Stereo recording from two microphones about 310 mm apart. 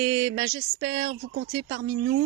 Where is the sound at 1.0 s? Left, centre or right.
Right.